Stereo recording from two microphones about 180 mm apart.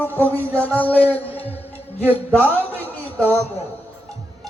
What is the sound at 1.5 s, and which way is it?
Music, 35° left (ahead or behind).